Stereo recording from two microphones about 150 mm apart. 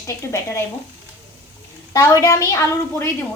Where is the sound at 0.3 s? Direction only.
15° left (ahead or behind).